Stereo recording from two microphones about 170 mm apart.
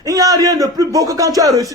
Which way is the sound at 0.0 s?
20° right (ahead or behind).